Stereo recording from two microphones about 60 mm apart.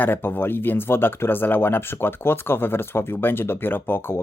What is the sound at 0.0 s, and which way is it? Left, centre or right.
Speech, left.